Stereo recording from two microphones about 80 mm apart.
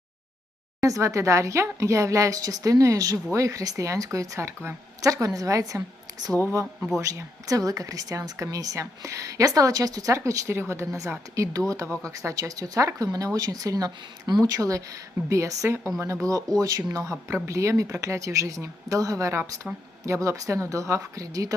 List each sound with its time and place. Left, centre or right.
0.8 s speech: right
6.7 s speech: centre
7.4 s speech: right